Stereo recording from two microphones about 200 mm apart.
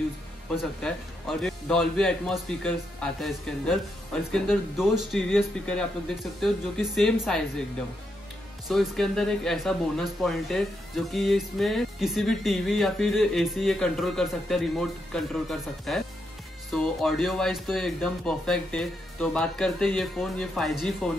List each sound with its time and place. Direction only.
0.8 s speech: 5° left (ahead or behind)
8.6 s speech: centre (ahead or behind)